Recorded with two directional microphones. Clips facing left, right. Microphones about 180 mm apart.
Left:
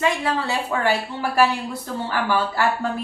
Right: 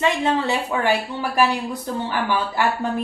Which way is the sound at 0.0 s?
20° right (ahead or behind).